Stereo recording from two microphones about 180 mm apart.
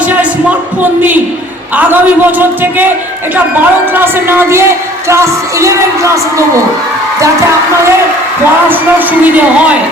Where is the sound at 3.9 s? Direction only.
10° right (ahead or behind).